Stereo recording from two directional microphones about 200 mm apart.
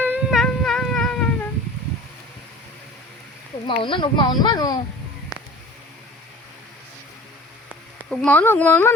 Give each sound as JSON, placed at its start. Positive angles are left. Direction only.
{"t": 0.0, "sound": "humming", "side_deg": -5}
{"t": 3.7, "sound": "speech", "side_deg": 25}
{"t": 7.7, "sound": "speech", "side_deg": 0}